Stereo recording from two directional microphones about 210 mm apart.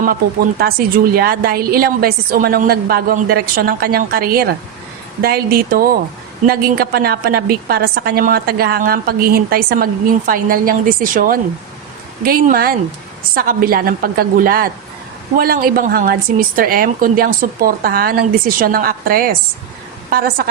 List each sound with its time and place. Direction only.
0.6 s a woman's voice: 45° right (ahead or behind)